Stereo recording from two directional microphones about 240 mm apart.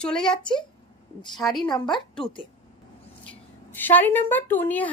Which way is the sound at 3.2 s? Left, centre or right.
Centre.